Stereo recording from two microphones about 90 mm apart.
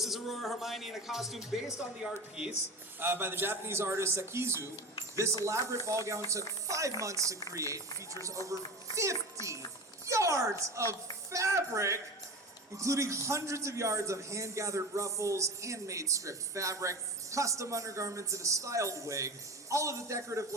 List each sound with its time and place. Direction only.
0.0 s music: centre (ahead or behind)
2.0 s speech: 10° right (ahead or behind)
3.0 s a man's voice: 25° right (ahead or behind)